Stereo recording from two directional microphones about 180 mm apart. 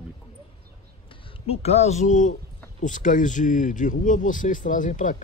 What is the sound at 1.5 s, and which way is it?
Speech, 35° left (ahead or behind).